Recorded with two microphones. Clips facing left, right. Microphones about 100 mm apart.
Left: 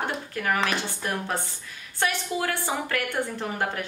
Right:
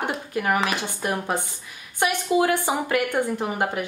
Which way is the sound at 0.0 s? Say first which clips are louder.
Right 3 dB; 15° right (ahead or behind).